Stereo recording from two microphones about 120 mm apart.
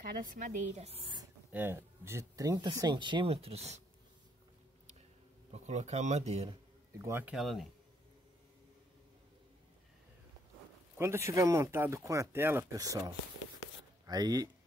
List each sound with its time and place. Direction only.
0.2 s speech: 90° right; by 1.1 s 55° right (ahead or behind)
1.5 s speech: 20° right (ahead or behind); by 3.8 s 65° right (ahead or behind)
5.5 s speech: 70° right (ahead or behind)
7.0 s speech: 25° right (ahead or behind)
7.2 s speech: centre (ahead or behind)
11.0 s speech: 20° right (ahead or behind)